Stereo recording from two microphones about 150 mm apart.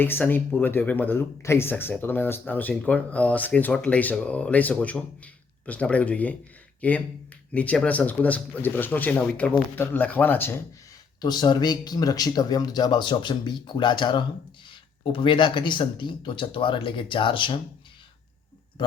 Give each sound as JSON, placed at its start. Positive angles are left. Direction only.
{"t": 0.0, "sound": "speech", "side_deg": 15}
{"t": 11.2, "sound": "speech", "side_deg": 30}